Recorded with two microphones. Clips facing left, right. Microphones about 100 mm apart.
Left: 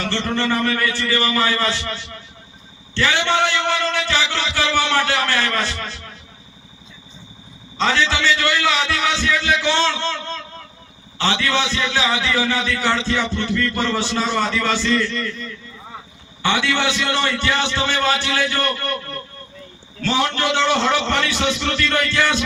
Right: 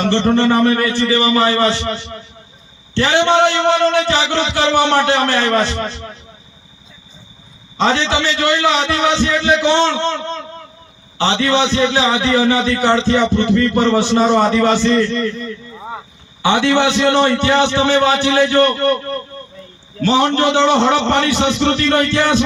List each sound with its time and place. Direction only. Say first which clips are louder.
0.0 s a man's voice: right 8 dB; 20° right (ahead or behind)
7.8 s a man's voice: right 4 dB; 20° right (ahead or behind)
20.0 s a man's voice: right 6 dB; 15° right (ahead or behind)